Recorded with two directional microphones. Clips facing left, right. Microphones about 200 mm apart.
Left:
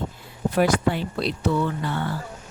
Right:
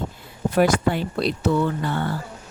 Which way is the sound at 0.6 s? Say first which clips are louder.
Right 2 dB; 50° right (ahead or behind).